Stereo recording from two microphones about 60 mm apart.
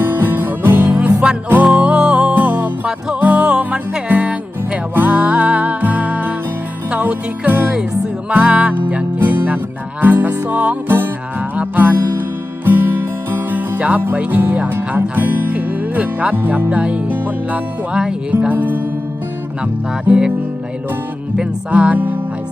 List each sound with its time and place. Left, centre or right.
0.0 s music: right
1.6 s music: centre
2.3 s music: right
8.3 s music: right
9.1 s music: right
14.7 s speech: right
15.1 s speech: right
16.6 s music: right
19.6 s music: right
21.7 s music: right